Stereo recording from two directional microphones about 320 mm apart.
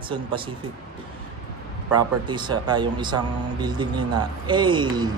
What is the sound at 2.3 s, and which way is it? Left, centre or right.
A man's voice, centre.